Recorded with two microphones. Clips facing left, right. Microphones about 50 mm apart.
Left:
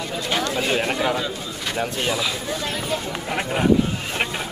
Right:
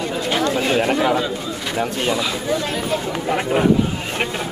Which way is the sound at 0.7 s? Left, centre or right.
Centre.